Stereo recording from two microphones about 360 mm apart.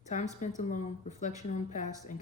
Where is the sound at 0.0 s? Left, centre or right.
Centre.